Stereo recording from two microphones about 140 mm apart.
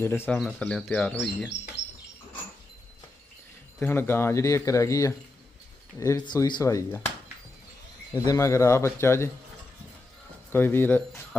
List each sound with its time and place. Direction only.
0.0 s speech: 15° left (ahead or behind)
0.3 s speech: centre (ahead or behind)
3.8 s speech: 15° left (ahead or behind)
8.1 s speech: 30° left (ahead or behind)
10.5 s speech: 15° left (ahead or behind)